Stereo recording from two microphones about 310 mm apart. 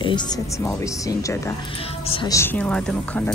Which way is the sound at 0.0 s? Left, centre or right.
Centre.